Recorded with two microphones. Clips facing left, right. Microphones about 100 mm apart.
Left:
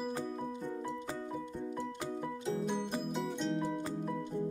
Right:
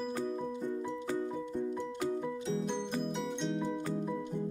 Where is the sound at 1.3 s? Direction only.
5° left (ahead or behind).